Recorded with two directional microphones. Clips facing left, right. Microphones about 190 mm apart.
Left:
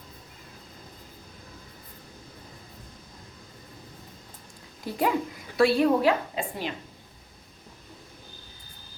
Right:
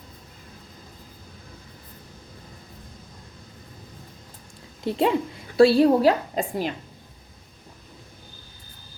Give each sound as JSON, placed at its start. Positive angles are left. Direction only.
{"t": 4.8, "sound": "a woman's voice", "side_deg": -25}